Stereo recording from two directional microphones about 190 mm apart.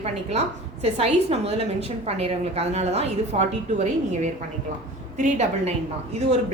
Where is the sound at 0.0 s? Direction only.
35° right (ahead or behind).